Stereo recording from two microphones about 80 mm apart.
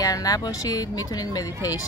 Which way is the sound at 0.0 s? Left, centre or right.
Left.